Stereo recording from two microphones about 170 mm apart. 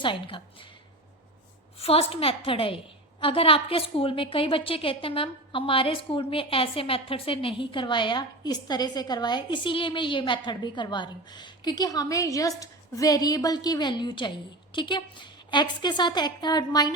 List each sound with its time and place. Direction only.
0.0 s a woman's voice: 30° left (ahead or behind)
1.8 s a woman's voice: 35° left (ahead or behind)